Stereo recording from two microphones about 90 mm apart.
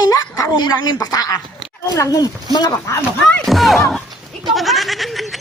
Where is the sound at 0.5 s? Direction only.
55° left (ahead or behind).